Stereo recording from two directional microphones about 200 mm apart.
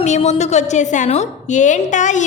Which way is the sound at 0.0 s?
35° left (ahead or behind).